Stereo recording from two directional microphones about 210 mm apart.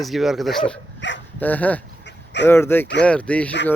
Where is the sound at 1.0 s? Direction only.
60° left (ahead or behind).